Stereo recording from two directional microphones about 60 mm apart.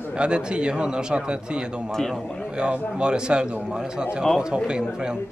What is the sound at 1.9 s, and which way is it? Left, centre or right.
Speech, centre.